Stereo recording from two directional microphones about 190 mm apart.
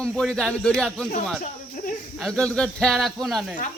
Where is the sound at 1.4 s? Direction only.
45° left (ahead or behind).